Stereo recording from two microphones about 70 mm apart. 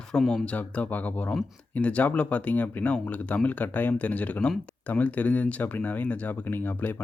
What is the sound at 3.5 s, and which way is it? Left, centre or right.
Speech, left.